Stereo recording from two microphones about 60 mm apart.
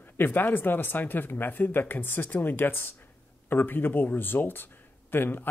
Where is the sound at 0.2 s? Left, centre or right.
Left.